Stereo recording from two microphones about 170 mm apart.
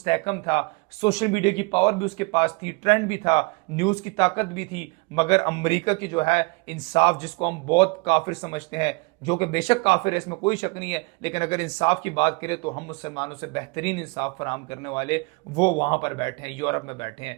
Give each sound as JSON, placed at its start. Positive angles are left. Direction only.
{"t": 0.0, "sound": "speech", "side_deg": 30}